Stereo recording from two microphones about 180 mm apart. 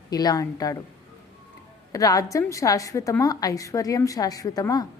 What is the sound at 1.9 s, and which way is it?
A woman's voice, 20° left (ahead or behind).